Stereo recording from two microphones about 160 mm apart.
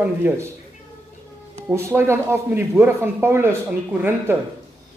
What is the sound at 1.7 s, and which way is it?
Speech, 15° right (ahead or behind).